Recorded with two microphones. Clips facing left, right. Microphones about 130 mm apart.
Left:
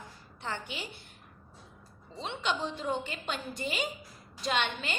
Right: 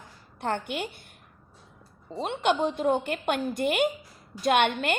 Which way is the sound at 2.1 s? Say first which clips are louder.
Right 8 dB; 55° right (ahead or behind).